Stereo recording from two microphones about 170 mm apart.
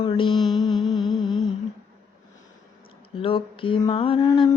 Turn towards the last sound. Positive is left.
turn(degrees=25)  # may be behind; listen again after turning